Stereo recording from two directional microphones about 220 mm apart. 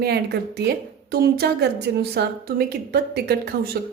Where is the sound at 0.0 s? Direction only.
45° right (ahead or behind).